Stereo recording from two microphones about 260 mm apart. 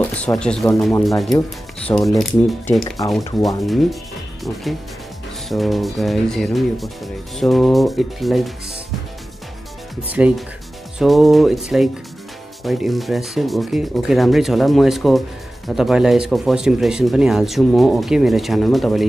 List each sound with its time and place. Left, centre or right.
0.0 s speech: centre
5.5 s speech: centre
10.0 s speech: centre